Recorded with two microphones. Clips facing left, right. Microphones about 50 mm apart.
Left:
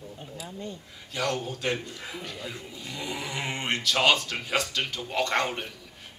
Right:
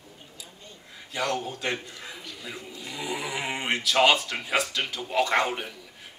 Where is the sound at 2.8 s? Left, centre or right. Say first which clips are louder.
Right 3 dB; centre.